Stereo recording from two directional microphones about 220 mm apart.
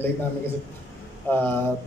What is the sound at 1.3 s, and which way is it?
Speech, 10° left (ahead or behind).